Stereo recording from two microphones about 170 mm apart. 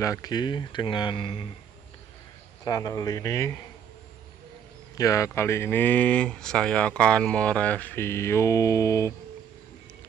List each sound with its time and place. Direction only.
0.0 s speech: 20° left (ahead or behind)
2.6 s speech: 20° left (ahead or behind)
4.9 s speech: 20° left (ahead or behind)